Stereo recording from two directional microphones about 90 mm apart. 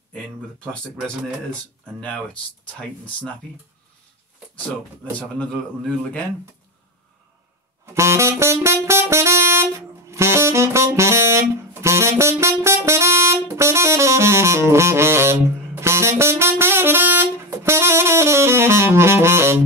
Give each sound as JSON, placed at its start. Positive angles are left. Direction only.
{"t": 1.0, "sound": "speech", "side_deg": 10}
{"t": 5.4, "sound": "speech", "side_deg": 15}
{"t": 7.8, "sound": "music", "side_deg": -30}